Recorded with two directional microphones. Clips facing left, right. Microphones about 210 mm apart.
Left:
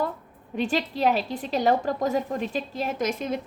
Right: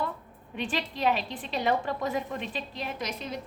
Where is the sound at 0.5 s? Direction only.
40° left (ahead or behind).